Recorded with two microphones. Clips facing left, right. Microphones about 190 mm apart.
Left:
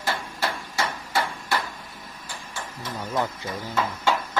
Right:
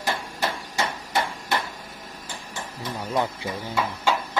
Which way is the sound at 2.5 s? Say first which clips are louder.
Right 1 dB; 15° right (ahead or behind).